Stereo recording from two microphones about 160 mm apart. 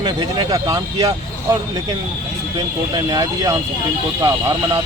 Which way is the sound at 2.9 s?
25° right (ahead or behind).